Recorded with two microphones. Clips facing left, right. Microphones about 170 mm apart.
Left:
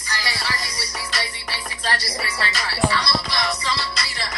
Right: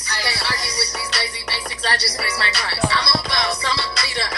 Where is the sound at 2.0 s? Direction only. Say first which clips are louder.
Right 2 dB; 75° right (ahead or behind).